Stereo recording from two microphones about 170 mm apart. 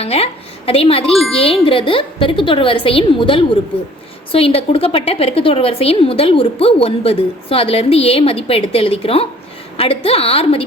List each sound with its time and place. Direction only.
0.0 s a woman's voice: 35° left (ahead or behind)